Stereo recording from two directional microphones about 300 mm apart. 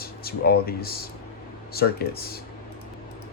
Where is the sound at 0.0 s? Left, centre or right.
Left.